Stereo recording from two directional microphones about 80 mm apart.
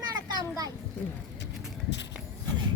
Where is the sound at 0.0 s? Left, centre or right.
Right.